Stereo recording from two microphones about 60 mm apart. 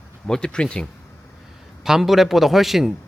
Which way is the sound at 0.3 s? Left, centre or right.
Centre.